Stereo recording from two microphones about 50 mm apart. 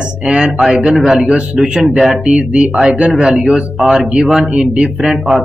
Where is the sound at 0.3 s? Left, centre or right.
Centre.